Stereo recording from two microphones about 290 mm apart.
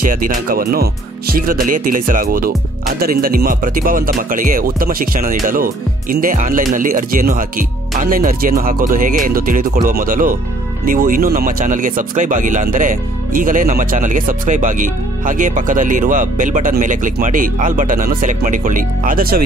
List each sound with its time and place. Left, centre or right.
0.0 s speech: right